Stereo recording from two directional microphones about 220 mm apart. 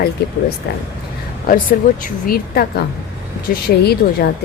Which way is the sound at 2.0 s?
40° left (ahead or behind).